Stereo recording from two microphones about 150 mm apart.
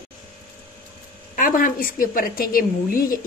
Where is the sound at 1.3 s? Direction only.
65° left (ahead or behind).